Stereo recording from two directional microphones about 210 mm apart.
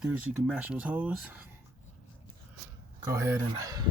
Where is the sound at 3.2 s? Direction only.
15° right (ahead or behind).